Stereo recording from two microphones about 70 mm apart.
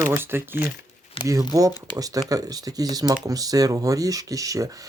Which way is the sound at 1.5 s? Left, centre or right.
Right.